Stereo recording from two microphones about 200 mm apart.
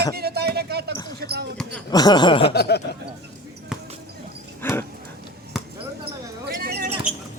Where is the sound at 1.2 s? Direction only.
55° right (ahead or behind).